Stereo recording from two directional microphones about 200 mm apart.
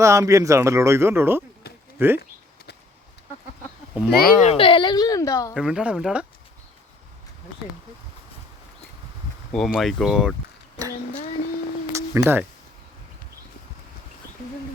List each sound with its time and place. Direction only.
0.0 s speech: 15° right (ahead or behind)
4.1 s speech: 50° left (ahead or behind)
4.4 s speech: 30° left (ahead or behind)
5.5 s speech: 5° right (ahead or behind)
9.5 s speech: centre (ahead or behind)
11.9 s a sound: 15° right (ahead or behind)